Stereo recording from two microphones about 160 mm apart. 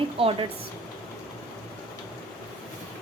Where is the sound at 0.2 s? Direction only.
35° right (ahead or behind).